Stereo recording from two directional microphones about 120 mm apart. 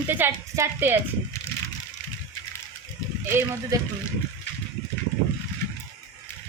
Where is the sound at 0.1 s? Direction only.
20° right (ahead or behind).